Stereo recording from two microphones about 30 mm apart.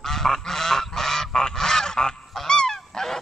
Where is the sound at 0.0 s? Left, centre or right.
Centre.